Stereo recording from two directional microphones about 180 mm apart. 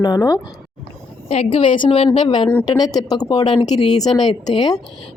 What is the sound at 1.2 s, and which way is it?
Speech, 30° left (ahead or behind).